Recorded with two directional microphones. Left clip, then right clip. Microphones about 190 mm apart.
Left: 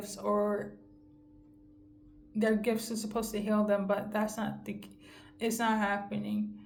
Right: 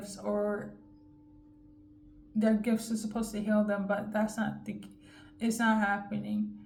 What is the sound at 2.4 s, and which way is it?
Speech, 30° left (ahead or behind).